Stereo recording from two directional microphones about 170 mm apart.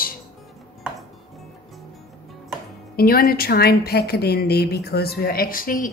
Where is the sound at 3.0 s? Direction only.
60° left (ahead or behind).